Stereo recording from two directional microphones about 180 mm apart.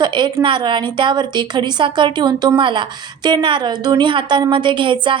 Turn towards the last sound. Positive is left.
turn(degrees=-25)  # may be behind; listen again after turning